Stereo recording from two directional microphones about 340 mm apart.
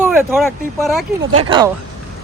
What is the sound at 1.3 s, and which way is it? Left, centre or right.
Speech, centre.